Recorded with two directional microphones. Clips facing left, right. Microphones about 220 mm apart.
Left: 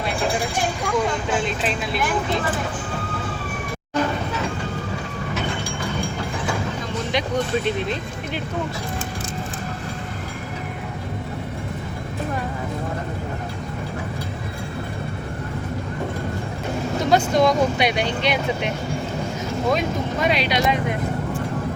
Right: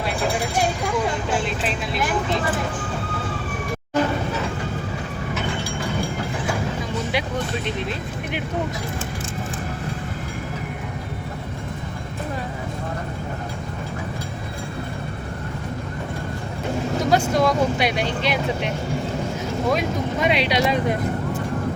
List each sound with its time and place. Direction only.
1.5 s vehicle: centre (ahead or behind)
17.1 s speech: 5° right (ahead or behind)
20.2 s speech: 25° right (ahead or behind)